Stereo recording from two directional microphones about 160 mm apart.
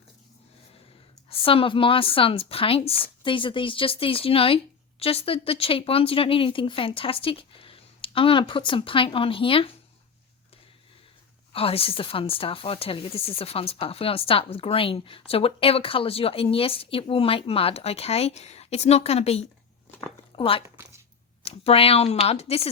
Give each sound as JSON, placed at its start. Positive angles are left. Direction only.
{"t": 1.3, "sound": "speech", "side_deg": 35}
{"t": 11.5, "sound": "speech", "side_deg": 35}